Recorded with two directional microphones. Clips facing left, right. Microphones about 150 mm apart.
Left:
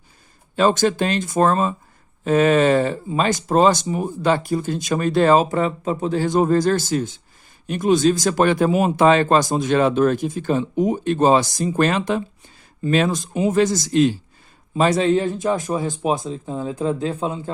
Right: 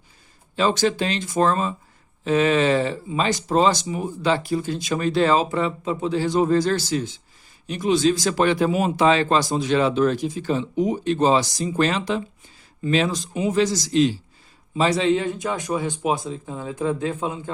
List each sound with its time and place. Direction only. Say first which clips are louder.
0.5 s speech: left 3 dB; 50° left (ahead or behind); by 17.5 s 30° left (ahead or behind)